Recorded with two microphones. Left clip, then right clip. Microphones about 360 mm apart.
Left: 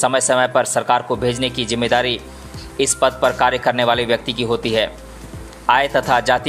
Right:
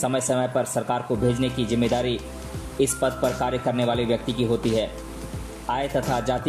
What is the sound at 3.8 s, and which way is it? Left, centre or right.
Speech, centre.